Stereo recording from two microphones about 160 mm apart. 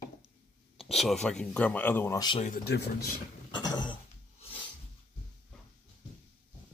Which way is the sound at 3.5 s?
25° left (ahead or behind).